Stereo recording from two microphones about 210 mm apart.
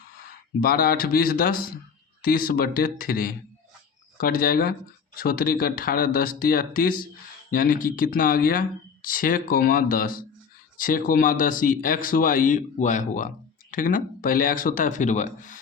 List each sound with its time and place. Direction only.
0.6 s speech: 45° left (ahead or behind)